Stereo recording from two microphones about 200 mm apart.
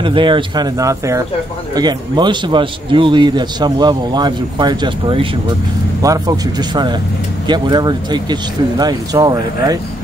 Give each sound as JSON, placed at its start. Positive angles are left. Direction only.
{"t": 0.0, "sound": "a man's voice", "side_deg": -25}